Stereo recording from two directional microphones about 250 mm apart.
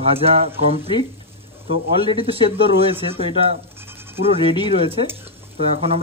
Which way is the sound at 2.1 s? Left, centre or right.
Right.